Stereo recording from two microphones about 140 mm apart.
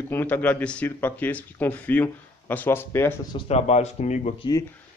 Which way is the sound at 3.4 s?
50° left (ahead or behind).